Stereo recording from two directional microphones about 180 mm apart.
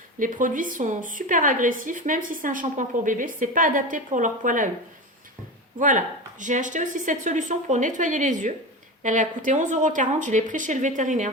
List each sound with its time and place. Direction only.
0.2 s a woman's voice: 45° right (ahead or behind)
5.8 s a woman's voice: 45° right (ahead or behind)